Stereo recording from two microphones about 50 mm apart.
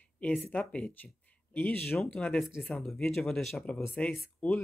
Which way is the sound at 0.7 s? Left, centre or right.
Left.